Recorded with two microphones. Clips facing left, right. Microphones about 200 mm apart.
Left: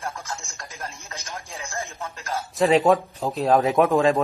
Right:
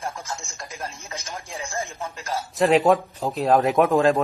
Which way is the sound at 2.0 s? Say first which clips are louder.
Right 1 dB; 15° right (ahead or behind).